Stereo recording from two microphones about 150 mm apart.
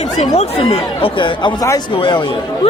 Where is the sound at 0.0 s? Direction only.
45° left (ahead or behind).